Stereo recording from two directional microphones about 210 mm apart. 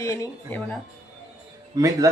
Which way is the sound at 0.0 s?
15° left (ahead or behind).